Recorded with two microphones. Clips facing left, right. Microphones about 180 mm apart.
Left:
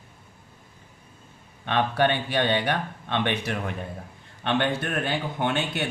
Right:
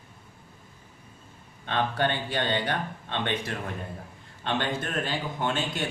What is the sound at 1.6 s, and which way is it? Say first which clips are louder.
Speech: left 4 dB; 70° left (ahead or behind).